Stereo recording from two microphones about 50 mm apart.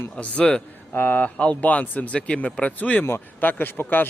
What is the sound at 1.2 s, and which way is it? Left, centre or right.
Speech, left.